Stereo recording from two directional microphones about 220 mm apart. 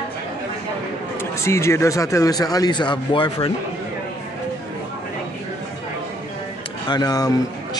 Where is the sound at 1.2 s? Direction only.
10° left (ahead or behind).